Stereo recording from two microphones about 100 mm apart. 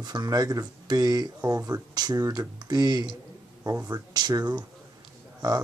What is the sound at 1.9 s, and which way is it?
Speech, 40° right (ahead or behind).